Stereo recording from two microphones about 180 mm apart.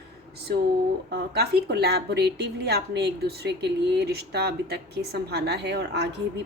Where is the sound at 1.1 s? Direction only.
60° right (ahead or behind).